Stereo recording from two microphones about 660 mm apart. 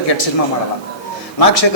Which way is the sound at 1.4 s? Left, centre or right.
Left.